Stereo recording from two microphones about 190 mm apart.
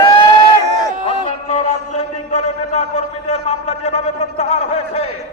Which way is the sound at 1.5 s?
35° left (ahead or behind).